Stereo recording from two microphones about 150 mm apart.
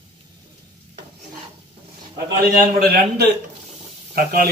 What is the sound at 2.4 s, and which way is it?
Speech, 80° right.